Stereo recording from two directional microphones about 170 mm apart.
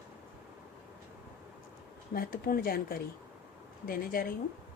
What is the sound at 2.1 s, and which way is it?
Speech, 60° left (ahead or behind).